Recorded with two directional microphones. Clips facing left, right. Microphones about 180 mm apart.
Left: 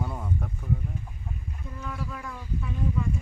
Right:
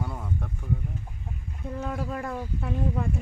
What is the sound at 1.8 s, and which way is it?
Speech, 60° right (ahead or behind).